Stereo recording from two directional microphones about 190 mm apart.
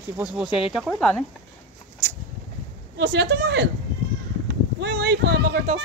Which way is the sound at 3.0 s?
60° right (ahead or behind).